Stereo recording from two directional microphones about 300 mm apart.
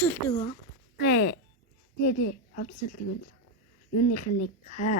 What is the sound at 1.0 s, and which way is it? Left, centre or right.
A woman's voice, left.